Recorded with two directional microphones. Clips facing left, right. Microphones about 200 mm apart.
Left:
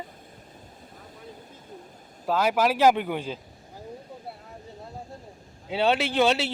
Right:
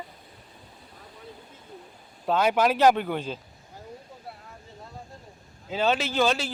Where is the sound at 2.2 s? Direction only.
5° left (ahead or behind).